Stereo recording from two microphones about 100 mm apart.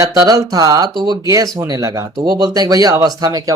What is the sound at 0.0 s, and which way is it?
Speech, 40° right (ahead or behind).